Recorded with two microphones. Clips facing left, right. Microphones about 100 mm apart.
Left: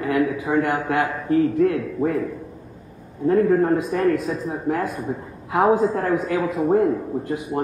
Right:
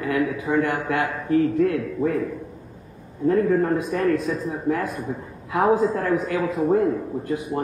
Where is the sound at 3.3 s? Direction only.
30° left (ahead or behind).